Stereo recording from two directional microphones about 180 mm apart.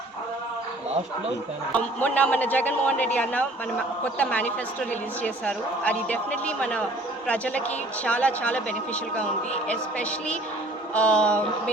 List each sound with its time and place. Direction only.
1.7 s a woman's voice: 10° left (ahead or behind)